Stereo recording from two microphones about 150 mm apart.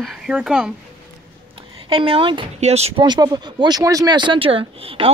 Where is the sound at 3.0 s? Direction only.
30° right (ahead or behind).